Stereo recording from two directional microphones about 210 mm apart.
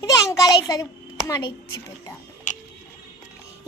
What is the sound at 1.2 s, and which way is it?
Speech, 15° left (ahead or behind).